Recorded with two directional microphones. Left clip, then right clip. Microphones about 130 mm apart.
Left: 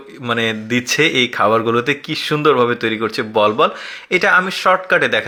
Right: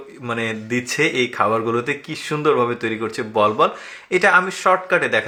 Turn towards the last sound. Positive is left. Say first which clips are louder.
# left 3 dB
turn(degrees=30)  # may be behind; listen again after turning